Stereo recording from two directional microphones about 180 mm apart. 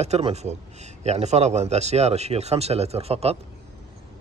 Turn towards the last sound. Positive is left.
turn(degrees=-35)  # may be behind; listen again after turning